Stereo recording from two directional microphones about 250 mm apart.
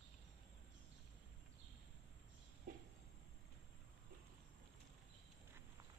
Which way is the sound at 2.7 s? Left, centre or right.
Right.